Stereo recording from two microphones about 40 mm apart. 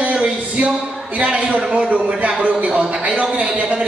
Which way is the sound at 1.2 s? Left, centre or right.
Right.